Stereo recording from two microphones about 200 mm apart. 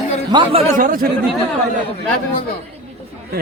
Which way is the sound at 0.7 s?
45° right (ahead or behind).